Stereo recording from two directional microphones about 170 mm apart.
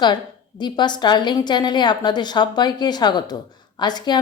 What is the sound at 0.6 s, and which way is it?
A woman's voice, 25° left (ahead or behind).